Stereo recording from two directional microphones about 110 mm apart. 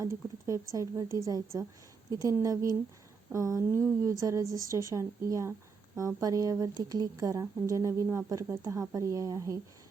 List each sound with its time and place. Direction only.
0.0 s a woman's voice: 30° right (ahead or behind)